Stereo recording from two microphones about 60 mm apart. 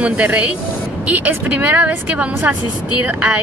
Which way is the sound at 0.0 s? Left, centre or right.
Right.